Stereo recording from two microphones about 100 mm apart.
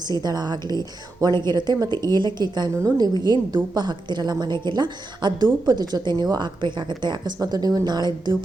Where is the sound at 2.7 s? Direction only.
35° right (ahead or behind).